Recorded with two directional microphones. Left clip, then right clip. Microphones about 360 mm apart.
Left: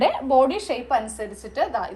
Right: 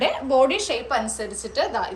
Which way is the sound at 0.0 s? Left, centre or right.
Centre.